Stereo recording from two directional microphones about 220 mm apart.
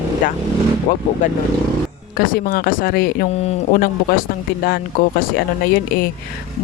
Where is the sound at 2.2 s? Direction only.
40° left (ahead or behind).